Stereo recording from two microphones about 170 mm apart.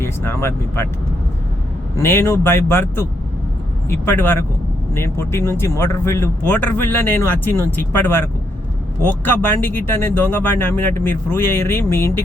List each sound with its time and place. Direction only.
0.0 s speech: 15° left (ahead or behind)
2.0 s speech: 15° left (ahead or behind)
9.2 s speech: 10° left (ahead or behind)